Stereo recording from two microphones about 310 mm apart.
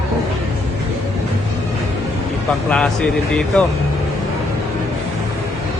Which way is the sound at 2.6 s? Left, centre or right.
Centre.